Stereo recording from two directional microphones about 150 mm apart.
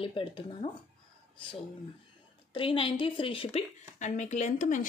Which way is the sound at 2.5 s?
35° left (ahead or behind).